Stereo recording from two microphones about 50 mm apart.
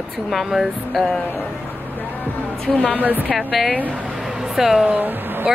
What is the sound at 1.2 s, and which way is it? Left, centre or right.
Speech, left.